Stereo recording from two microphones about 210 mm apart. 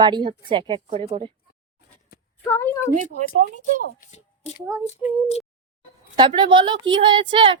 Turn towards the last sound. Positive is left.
turn(degrees=-20)  # may be behind; listen again after turning